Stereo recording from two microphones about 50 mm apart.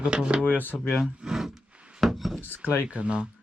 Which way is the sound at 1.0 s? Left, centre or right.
Centre.